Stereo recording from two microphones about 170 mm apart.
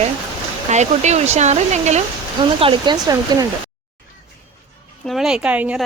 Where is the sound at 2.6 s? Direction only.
25° right (ahead or behind).